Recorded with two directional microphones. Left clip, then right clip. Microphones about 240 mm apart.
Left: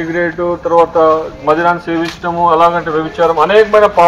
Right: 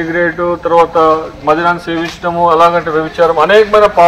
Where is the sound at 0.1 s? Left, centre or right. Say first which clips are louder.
Right 2 dB; right.